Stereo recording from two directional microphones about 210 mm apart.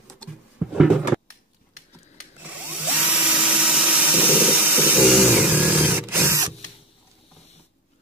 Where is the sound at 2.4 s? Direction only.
5° right (ahead or behind).